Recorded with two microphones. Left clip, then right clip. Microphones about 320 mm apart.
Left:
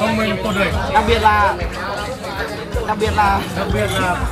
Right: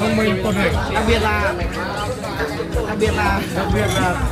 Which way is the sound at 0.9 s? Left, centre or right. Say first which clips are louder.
Left 8 dB; left.